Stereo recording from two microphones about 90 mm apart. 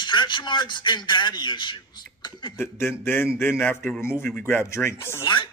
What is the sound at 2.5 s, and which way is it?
A man's voice, 25° left (ahead or behind).